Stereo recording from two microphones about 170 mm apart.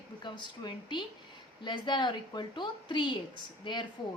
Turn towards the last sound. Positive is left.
turn(degrees=25)  # may be behind; listen again after turning